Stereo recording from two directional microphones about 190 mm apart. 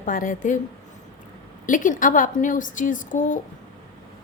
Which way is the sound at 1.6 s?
45° left (ahead or behind).